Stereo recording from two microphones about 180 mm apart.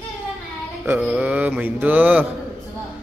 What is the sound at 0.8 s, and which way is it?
Speech, 10° right (ahead or behind).